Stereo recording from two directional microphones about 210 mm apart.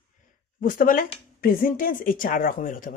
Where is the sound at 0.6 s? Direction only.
40° left (ahead or behind).